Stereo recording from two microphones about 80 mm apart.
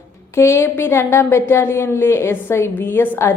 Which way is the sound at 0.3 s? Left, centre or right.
Left.